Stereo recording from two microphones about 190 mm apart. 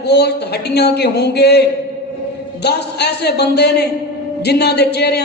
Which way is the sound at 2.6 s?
60° left (ahead or behind).